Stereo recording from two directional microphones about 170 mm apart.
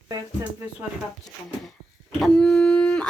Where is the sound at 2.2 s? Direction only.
5° left (ahead or behind).